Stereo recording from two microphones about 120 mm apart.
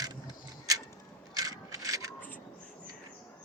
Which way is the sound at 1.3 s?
30° right (ahead or behind).